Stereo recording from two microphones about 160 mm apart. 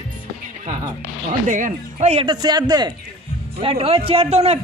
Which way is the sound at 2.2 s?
25° right (ahead or behind).